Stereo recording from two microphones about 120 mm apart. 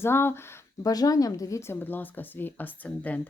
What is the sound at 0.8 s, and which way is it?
A woman's voice, 30° left (ahead or behind).